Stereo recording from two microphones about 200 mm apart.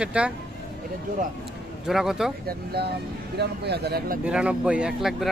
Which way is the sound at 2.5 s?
50° right (ahead or behind).